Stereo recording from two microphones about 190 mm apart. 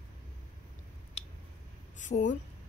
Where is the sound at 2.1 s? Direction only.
60° left (ahead or behind).